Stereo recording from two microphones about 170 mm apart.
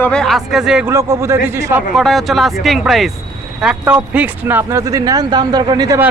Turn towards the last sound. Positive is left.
turn(degrees=-25)  # may be behind; listen again after turning